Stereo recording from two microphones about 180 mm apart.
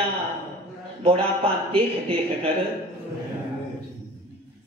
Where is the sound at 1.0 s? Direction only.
30° right (ahead or behind).